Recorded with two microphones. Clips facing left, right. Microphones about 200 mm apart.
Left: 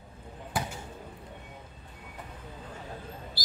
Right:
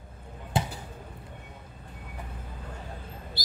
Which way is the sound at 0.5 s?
25° right (ahead or behind).